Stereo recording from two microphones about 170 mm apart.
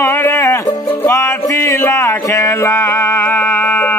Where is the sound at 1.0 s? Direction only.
15° left (ahead or behind).